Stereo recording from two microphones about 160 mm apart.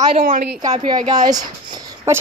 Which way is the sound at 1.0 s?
25° right (ahead or behind).